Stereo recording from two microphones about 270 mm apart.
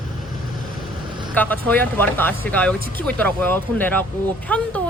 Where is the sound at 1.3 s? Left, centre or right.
Centre.